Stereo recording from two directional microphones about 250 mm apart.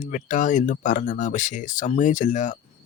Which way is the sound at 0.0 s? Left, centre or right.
Left.